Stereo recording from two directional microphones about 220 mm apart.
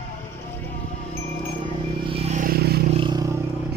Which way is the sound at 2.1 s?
30° right (ahead or behind).